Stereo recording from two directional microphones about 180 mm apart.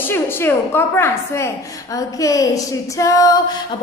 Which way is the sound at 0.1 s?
15° left (ahead or behind).